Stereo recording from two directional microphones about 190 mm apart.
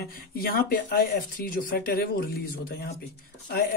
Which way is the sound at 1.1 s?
50° left (ahead or behind).